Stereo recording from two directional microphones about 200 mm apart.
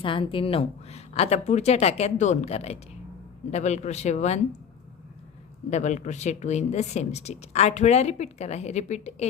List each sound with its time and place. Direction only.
0.0 s a woman's voice: 25° left (ahead or behind)
5.7 s a woman's voice: 35° left (ahead or behind)